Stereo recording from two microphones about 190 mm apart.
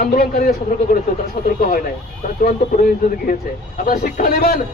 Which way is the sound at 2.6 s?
55° left (ahead or behind).